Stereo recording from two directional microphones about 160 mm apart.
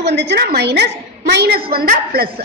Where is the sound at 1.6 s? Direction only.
70° right (ahead or behind).